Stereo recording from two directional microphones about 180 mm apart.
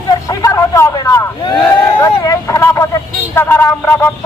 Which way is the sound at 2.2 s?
20° left (ahead or behind).